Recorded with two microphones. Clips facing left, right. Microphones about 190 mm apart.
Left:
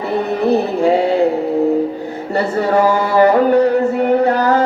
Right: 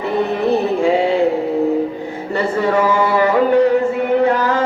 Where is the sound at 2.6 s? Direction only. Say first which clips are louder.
Left 1 dB; 40° left (ahead or behind).